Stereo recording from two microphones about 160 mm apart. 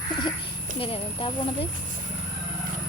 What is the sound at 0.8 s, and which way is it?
Speech, 35° left (ahead or behind).